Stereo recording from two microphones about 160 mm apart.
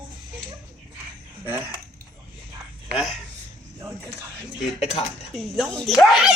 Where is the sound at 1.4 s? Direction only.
15° right (ahead or behind).